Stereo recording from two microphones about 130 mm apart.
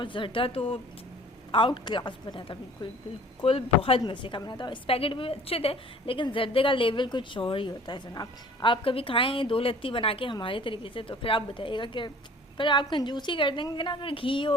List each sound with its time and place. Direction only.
0.0 s speech: 40° left (ahead or behind)